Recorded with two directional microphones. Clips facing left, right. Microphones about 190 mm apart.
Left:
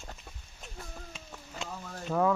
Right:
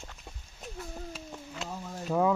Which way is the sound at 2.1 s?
15° right (ahead or behind).